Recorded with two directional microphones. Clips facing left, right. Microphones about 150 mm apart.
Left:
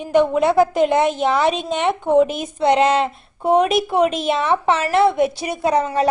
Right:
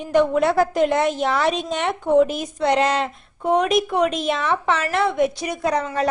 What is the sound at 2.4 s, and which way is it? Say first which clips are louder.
A woman's voice: left 3 dB; 25° left (ahead or behind).